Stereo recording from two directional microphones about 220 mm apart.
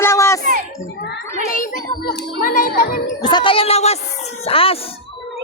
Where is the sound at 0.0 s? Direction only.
10° left (ahead or behind).